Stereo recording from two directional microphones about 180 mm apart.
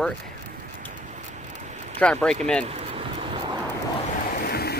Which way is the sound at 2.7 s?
35° right (ahead or behind).